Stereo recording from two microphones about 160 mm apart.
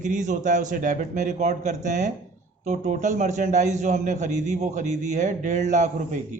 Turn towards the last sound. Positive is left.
turn(degrees=-50)  # may be behind; listen again after turning